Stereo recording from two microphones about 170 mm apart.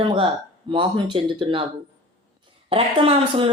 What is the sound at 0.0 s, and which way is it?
Speech, 30° right (ahead or behind).